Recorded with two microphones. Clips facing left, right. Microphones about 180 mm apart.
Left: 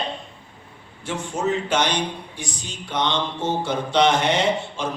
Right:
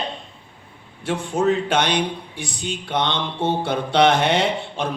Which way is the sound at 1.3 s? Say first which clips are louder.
Right 3 dB; 55° right (ahead or behind).